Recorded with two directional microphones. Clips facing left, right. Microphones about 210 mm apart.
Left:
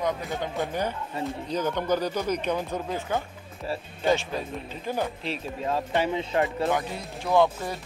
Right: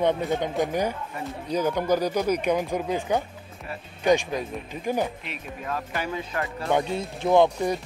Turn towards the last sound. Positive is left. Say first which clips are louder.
# right 3 dB
turn(degrees=-20)  # may be behind; listen again after turning